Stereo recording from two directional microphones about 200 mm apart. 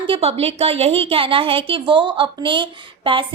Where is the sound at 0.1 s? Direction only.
30° right (ahead or behind).